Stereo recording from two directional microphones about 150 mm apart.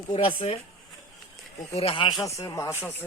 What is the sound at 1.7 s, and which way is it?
Speech, 40° left (ahead or behind).